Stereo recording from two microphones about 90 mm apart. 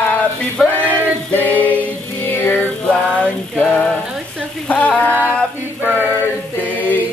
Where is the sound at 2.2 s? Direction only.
20° left (ahead or behind).